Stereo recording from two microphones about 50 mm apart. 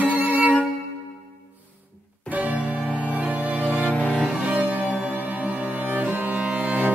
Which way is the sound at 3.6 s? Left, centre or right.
Right.